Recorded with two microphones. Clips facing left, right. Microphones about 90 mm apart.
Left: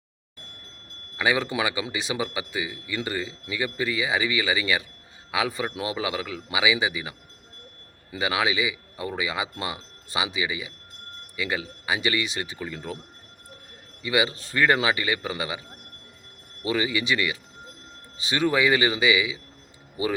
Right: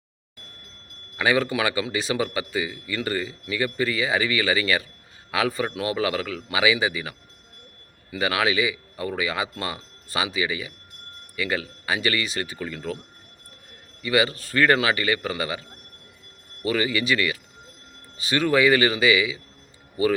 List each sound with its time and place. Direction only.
1.1 s a man's voice: 15° left (ahead or behind)
8.2 s a man's voice: 15° left (ahead or behind)
14.0 s a man's voice: 15° left (ahead or behind)
16.6 s a man's voice: 15° left (ahead or behind)